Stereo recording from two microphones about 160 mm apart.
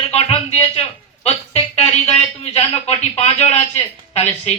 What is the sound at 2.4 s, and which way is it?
Speech, 40° left (ahead or behind).